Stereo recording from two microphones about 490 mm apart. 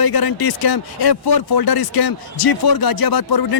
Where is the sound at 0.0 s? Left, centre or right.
Left.